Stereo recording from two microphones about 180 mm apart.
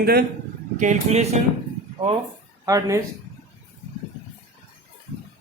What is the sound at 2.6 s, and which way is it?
Speech, 15° right (ahead or behind).